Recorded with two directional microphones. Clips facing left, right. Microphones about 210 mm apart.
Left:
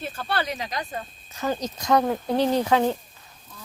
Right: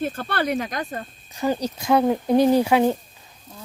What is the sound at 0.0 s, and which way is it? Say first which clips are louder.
Speech: right 4 dB; 50° right (ahead or behind).